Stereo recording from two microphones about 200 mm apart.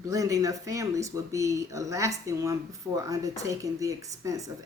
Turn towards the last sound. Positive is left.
turn(degrees=-15)  # may be behind; listen again after turning